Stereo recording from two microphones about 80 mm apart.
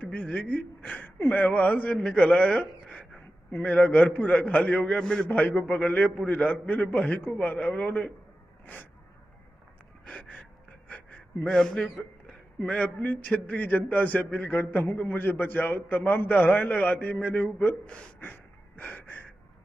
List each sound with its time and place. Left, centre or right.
0.0 s a sound: centre
0.5 s a man's voice: centre
5.3 s a man's voice: left
10.0 s gasp: centre
11.4 s a man's voice: centre
18.8 s gasp: left